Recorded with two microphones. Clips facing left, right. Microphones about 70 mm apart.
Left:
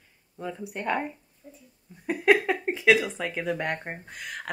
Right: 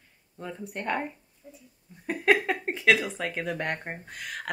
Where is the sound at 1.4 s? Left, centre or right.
Centre.